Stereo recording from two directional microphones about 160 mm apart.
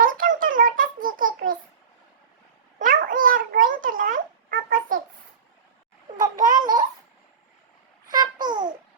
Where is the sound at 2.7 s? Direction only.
60° right (ahead or behind).